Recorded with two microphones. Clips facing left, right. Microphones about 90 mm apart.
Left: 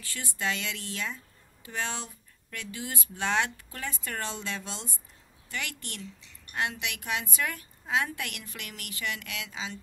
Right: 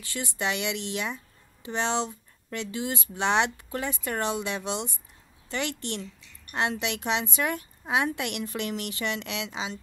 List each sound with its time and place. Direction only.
0.0 s speech: 20° right (ahead or behind)